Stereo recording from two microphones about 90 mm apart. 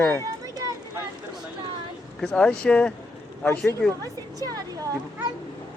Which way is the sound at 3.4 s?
25° left (ahead or behind).